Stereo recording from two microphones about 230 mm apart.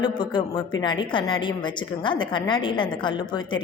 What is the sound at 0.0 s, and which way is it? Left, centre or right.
A woman's voice, centre.